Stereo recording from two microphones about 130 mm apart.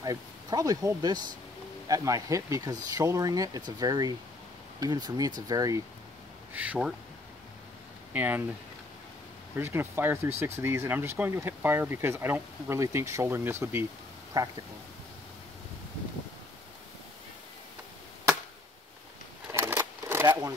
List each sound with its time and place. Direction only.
0.0 s speech: 30° right (ahead or behind)
6.5 s speech: 10° right (ahead or behind)
8.1 s speech: 15° right (ahead or behind)
9.6 s speech: 15° right (ahead or behind)
14.3 s speech: 30° right (ahead or behind)
19.5 s sewing machine: 20° right (ahead or behind)